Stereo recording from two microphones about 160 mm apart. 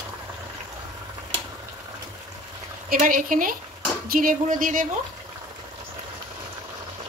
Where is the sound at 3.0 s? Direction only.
55° right (ahead or behind).